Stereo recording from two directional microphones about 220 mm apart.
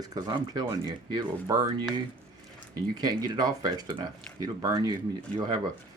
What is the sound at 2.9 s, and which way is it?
Speech, 20° right (ahead or behind).